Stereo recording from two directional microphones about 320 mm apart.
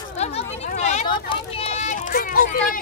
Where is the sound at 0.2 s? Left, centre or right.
Centre.